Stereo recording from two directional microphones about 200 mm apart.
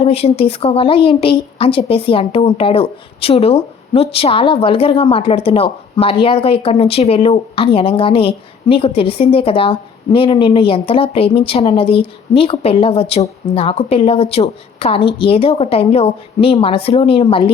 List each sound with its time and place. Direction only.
0.0 s speech: 30° left (ahead or behind)